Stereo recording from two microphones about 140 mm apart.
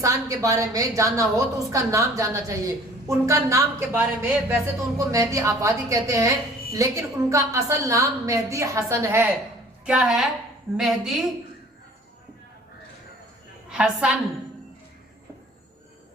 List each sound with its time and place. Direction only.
0.0 s a woman's voice: 25° right (ahead or behind)
9.8 s a woman's voice: 5° right (ahead or behind)
13.7 s a woman's voice: 5° right (ahead or behind)